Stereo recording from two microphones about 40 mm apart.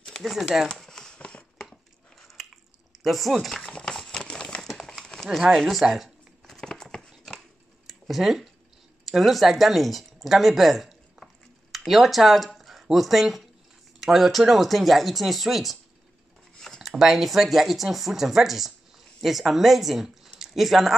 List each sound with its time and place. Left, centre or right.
0.2 s speech: centre
0.8 s a sound: centre
2.2 s biting: centre
3.8 s horse: centre
4.6 s crumpling: centre
5.6 s speech: centre
6.4 s a sound: centre
7.8 s a sound: centre
9.0 s speech: centre
11.2 s stir: centre
11.7 s speech: centre
12.5 s a sound: centre
13.9 s speech: centre
17.0 s speech: centre